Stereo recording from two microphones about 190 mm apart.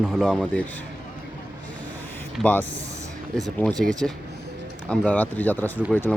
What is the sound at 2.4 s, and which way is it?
Speech, 10° left (ahead or behind).